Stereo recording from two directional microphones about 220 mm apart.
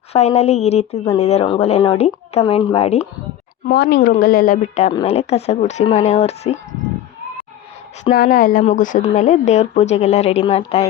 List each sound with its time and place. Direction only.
0.1 s speech: 30° left (ahead or behind)
3.7 s a woman's voice: 45° left (ahead or behind); by 6.6 s 30° left (ahead or behind)
8.1 s a woman's voice: 40° left (ahead or behind)